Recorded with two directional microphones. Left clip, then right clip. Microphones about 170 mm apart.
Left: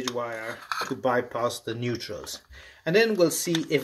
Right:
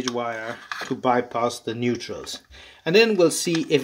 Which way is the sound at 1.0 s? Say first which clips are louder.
Right 5 dB; 40° right (ahead or behind).